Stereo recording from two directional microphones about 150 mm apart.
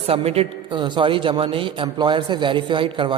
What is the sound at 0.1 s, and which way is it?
A man's voice, 40° right (ahead or behind).